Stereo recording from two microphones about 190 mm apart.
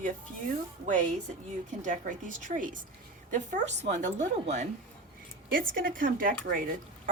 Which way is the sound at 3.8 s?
40° right (ahead or behind).